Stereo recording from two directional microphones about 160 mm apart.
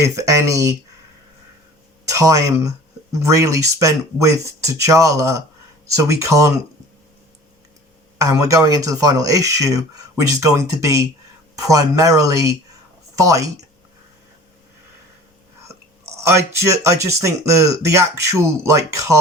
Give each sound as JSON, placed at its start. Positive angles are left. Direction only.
{"t": 0.0, "sound": "speech", "side_deg": -20}
{"t": 2.0, "sound": "speech", "side_deg": -20}
{"t": 8.2, "sound": "speech", "side_deg": -20}
{"t": 16.2, "sound": "speech", "side_deg": -20}